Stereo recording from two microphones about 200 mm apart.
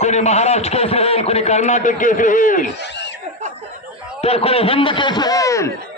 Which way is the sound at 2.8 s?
60° left (ahead or behind).